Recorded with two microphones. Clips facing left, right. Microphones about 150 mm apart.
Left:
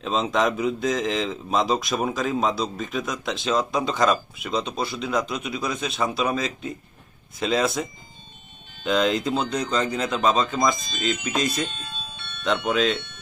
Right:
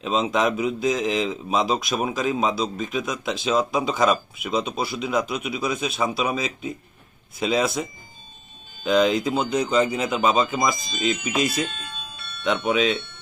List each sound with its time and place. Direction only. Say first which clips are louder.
0.0 s speech: right 1 dB; 5° right (ahead or behind)
11.7 s bell: even; 30° left (ahead or behind)
12.6 s speech: right 1 dB; 5° right (ahead or behind)